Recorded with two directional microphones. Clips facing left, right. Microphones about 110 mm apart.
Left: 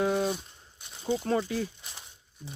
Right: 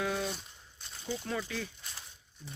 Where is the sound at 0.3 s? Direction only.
15° left (ahead or behind).